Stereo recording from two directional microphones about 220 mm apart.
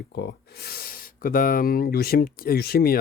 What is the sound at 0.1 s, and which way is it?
Speech, 45° left (ahead or behind).